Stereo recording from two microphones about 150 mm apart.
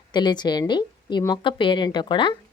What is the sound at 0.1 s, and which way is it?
A woman's voice, 30° left (ahead or behind).